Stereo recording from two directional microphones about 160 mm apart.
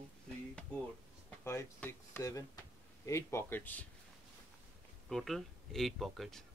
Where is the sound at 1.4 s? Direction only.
15° left (ahead or behind).